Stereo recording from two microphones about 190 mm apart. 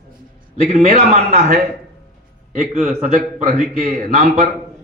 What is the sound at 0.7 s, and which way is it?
Speech, 40° right (ahead or behind).